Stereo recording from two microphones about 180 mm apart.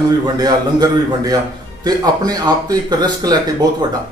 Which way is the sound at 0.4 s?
20° right (ahead or behind).